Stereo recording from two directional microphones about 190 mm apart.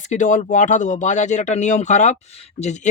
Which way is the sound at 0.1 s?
40° left (ahead or behind).